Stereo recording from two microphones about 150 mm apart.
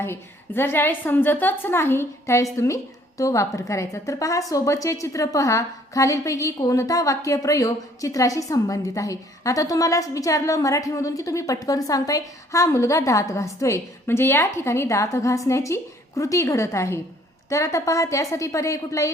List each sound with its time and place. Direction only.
0.0 s a woman's voice: 15° left (ahead or behind)